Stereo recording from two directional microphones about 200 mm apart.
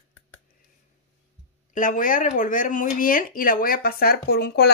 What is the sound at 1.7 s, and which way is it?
Speech, 40° left (ahead or behind).